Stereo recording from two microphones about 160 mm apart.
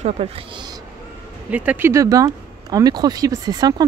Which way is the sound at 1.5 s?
10° right (ahead or behind).